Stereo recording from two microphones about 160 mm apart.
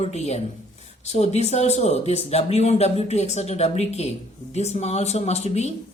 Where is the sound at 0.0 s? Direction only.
40° left (ahead or behind).